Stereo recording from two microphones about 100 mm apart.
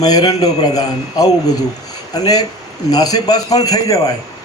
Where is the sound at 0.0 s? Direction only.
40° left (ahead or behind).